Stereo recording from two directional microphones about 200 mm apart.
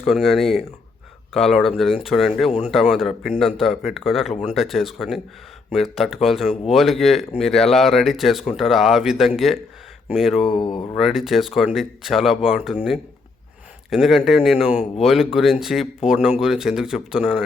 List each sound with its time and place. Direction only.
0.0 s speech: centre (ahead or behind)
10.5 s speech: 25° left (ahead or behind)
10.9 s speech: centre (ahead or behind)